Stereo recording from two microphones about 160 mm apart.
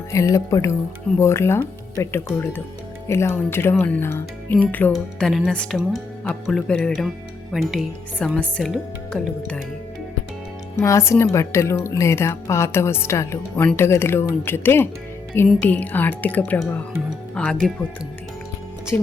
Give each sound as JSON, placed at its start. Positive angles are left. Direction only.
{"t": 0.1, "sound": "speech", "side_deg": 20}
{"t": 10.8, "sound": "speech", "side_deg": 15}